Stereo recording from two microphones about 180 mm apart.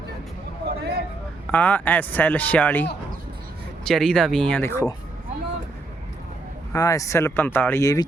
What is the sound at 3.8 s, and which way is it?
Speech, 5° left (ahead or behind).